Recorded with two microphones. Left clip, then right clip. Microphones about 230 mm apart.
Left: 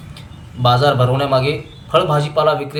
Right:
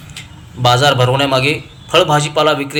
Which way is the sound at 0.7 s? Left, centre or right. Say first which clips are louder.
Right 3 dB; right.